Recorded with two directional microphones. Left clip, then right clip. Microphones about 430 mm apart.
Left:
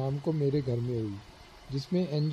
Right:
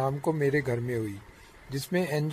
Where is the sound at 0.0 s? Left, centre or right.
Right.